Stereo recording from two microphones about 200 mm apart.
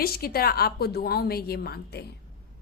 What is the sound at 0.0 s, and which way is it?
A woman's voice, 50° left (ahead or behind).